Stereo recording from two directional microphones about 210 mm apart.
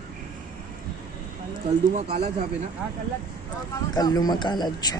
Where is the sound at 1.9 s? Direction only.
30° right (ahead or behind).